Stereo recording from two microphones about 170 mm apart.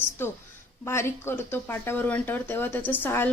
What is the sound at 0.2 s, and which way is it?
Speech, 10° left (ahead or behind).